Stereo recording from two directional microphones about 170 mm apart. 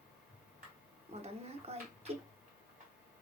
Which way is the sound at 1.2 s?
35° right (ahead or behind).